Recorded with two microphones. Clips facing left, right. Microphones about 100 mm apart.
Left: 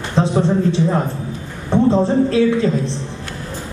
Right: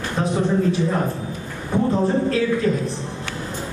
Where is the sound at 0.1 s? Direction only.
25° left (ahead or behind).